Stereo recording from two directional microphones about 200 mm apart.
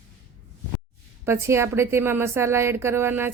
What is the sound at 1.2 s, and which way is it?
A woman's voice, 15° right (ahead or behind).